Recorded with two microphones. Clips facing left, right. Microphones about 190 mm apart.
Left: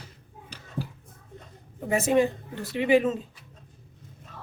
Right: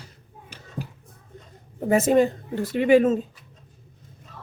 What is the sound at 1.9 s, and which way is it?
Speech, 45° right (ahead or behind).